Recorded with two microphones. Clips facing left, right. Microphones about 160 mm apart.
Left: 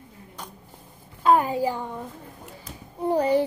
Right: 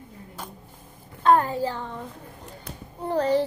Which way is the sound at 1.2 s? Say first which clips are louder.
Even; 10° left (ahead or behind).